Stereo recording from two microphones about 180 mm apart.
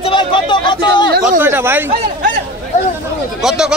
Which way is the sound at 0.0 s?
30° left (ahead or behind).